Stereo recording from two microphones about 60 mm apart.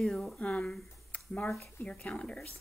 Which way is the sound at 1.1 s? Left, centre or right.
Left.